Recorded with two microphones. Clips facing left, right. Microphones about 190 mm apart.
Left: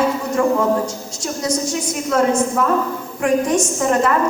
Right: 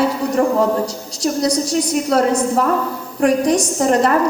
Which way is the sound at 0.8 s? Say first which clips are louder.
Right 5 dB; 35° right (ahead or behind).